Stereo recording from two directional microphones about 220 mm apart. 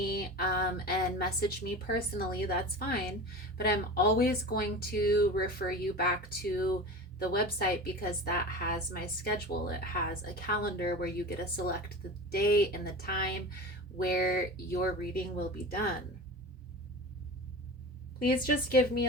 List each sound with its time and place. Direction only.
0.0 s speech: 45° left (ahead or behind)
18.2 s speech: 40° left (ahead or behind)